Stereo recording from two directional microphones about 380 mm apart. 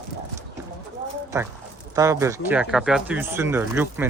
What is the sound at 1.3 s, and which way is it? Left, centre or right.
Speech, centre.